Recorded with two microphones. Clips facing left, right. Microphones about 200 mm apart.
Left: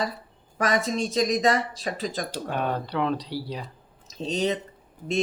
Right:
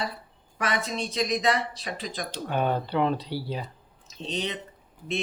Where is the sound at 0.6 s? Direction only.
40° left (ahead or behind).